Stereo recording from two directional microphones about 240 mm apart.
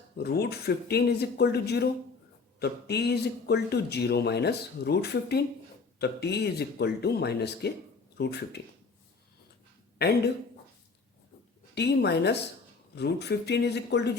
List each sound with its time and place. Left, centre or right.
0.2 s speech: left
10.0 s speech: left
11.7 s speech: left